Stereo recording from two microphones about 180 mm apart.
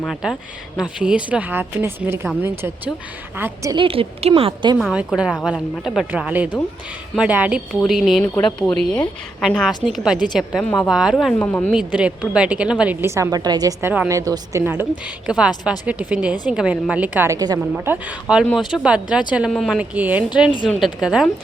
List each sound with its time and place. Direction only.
0.0 s a woman's voice: centre (ahead or behind); by 4.8 s 30° right (ahead or behind)
4.8 s a woman's voice: 5° right (ahead or behind)
11.4 s a woman's voice: 10° left (ahead or behind)
11.7 s a woman's voice: 5° right (ahead or behind)
17.7 s a woman's voice: 10° right (ahead or behind)